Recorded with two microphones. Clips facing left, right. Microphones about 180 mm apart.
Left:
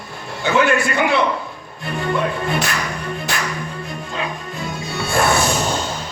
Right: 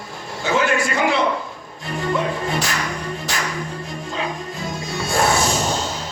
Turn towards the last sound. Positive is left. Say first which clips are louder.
# left 1 dB
turn(degrees=60)  # may be behind; listen again after turning